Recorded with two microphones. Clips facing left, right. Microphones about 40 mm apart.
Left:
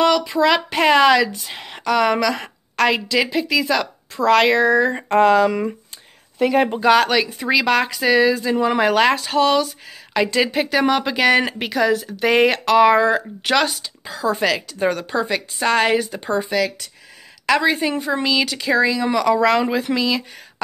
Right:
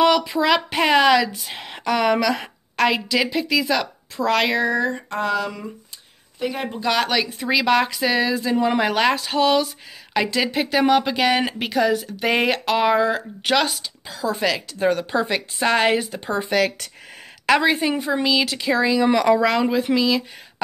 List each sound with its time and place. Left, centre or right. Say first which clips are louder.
0.0 s speech: left 1 dB; centre
4.9 s a sound: left 9 dB; left
6.9 s a woman's voice: left 4 dB; centre
16.4 s speech: right 4 dB; right
17.5 s a woman's voice: even; centre
17.7 s speech: left 1 dB; centre
19.0 s speech: right 1 dB; right
19.3 s speech: left 1 dB; centre